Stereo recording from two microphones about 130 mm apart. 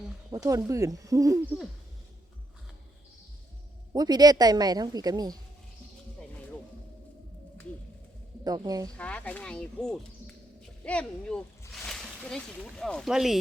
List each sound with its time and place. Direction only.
0.3 s speech: 25° right (ahead or behind)
3.9 s a woman's voice: 30° right (ahead or behind)
6.1 s music: 10° left (ahead or behind)
8.4 s speech: 30° right (ahead or behind)
9.0 s speech: 10° left (ahead or behind)